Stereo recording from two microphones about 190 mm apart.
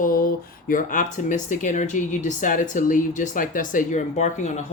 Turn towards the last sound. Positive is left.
turn(degrees=35)  # may be behind; listen again after turning